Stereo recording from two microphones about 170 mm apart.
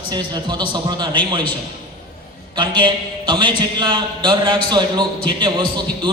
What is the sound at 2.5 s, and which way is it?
A man's voice, 30° right (ahead or behind).